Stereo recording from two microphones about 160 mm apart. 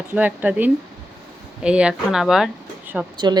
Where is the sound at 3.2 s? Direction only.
25° right (ahead or behind).